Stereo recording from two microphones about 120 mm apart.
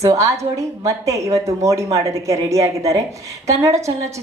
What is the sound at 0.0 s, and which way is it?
A woman's voice, 25° right (ahead or behind).